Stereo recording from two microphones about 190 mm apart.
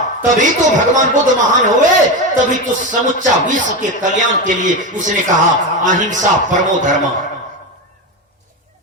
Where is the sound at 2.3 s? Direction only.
40° right (ahead or behind).